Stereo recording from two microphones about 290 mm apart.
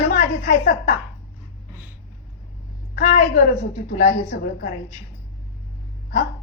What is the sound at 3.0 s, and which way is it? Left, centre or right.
A woman's voice, left.